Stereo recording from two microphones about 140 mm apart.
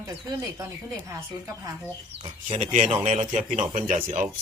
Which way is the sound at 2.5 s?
60° right (ahead or behind).